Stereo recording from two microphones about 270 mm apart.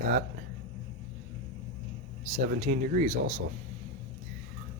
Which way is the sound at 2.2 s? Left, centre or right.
Right.